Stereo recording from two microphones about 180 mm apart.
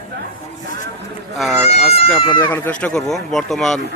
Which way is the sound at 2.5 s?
10° left (ahead or behind).